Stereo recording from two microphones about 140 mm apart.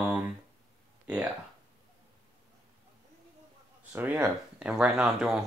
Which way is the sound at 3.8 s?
10° right (ahead or behind).